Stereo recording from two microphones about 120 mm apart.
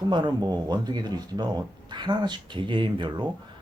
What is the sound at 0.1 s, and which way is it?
Speech, 40° right (ahead or behind).